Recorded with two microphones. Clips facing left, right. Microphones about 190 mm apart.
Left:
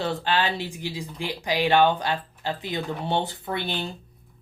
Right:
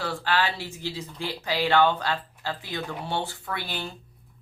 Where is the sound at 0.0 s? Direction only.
20° left (ahead or behind).